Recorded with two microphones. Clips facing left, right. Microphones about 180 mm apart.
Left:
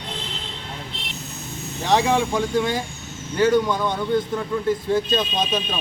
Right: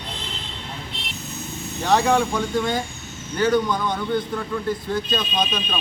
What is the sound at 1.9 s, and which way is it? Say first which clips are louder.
Speech: even; 20° left (ahead or behind).